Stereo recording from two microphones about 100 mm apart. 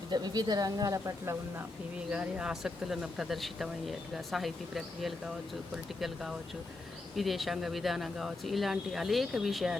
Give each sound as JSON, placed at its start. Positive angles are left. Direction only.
{"t": 0.1, "sound": "speech", "side_deg": -45}
{"t": 2.0, "sound": "speech", "side_deg": -15}